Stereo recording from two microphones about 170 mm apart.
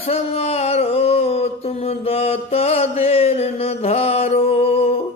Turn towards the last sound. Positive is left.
turn(degrees=35)  # may be behind; listen again after turning